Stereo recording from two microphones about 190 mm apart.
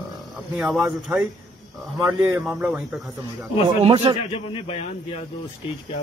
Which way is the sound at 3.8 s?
30° right (ahead or behind).